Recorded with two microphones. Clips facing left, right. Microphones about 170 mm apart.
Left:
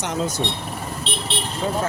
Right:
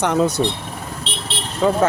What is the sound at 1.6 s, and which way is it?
Speech, 75° right (ahead or behind).